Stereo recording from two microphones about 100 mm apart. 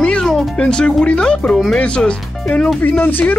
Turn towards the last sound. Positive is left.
turn(degrees=20)  # may be behind; listen again after turning